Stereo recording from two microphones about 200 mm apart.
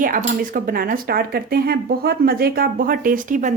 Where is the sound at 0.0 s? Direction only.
40° right (ahead or behind).